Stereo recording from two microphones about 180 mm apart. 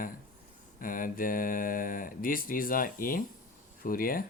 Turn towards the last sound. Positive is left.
turn(degrees=55)  # may be behind; listen again after turning